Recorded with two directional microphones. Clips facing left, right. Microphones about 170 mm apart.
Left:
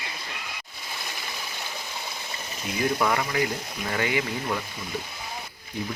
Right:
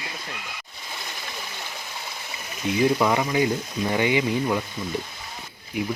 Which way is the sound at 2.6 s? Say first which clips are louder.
Right 5 dB; 20° right (ahead or behind).